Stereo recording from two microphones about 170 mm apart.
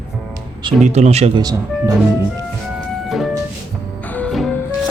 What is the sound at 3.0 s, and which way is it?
Music, centre (ahead or behind).